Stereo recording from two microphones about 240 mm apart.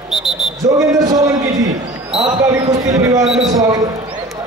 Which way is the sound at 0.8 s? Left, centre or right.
Centre.